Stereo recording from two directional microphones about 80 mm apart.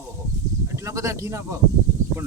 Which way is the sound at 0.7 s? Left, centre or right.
Right.